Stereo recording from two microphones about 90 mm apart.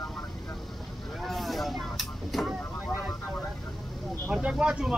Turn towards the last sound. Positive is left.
turn(degrees=-10)  # may be behind; listen again after turning